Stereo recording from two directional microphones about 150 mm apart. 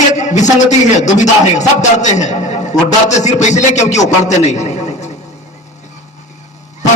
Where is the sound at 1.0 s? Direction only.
50° left (ahead or behind).